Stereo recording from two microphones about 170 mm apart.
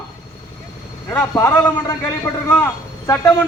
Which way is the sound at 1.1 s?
15° left (ahead or behind).